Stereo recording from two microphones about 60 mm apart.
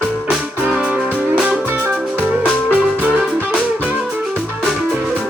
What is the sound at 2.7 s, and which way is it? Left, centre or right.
Music, right.